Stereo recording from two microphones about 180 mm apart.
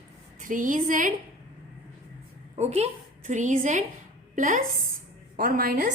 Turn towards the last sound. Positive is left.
turn(degrees=-55)  # may be behind; listen again after turning